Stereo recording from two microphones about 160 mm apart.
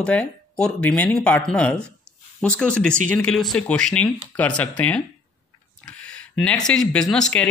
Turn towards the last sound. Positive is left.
turn(degrees=5)  # may be behind; listen again after turning